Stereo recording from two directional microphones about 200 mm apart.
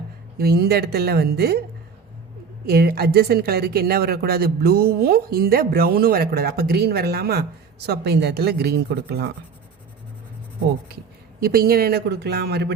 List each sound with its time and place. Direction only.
0.3 s a woman's voice: 50° right (ahead or behind)
2.6 s a woman's voice: 50° right (ahead or behind)
11.3 s a woman's voice: 50° right (ahead or behind)